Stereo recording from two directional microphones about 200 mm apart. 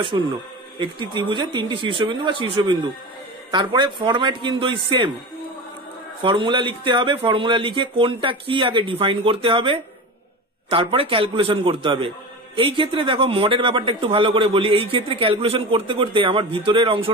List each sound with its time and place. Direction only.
0.1 s a man's voice: 20° right (ahead or behind)
6.2 s a man's voice: 25° right (ahead or behind)